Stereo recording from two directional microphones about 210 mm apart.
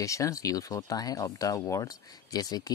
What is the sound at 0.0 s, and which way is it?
Speech, 15° left (ahead or behind).